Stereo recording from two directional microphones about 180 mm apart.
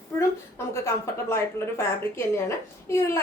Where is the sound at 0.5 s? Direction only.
15° left (ahead or behind).